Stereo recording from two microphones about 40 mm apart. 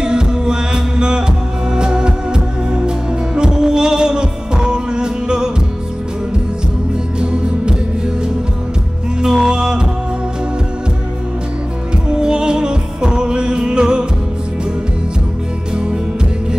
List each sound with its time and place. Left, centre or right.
0.0 s music: right
3.3 s heart sounds: centre
7.2 s music: right
9.2 s music: centre
12.1 s music: centre